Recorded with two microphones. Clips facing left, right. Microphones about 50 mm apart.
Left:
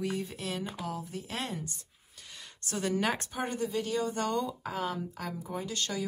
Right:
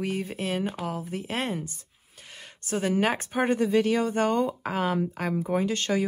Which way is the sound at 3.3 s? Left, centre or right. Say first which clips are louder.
Right 9 dB; right.